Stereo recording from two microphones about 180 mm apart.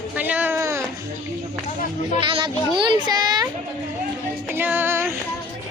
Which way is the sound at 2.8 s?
25° right (ahead or behind).